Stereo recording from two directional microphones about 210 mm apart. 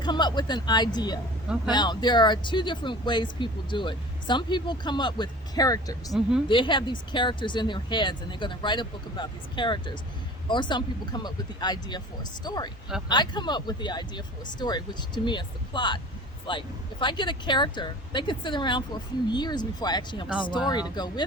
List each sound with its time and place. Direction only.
0.0 s speech: 20° left (ahead or behind)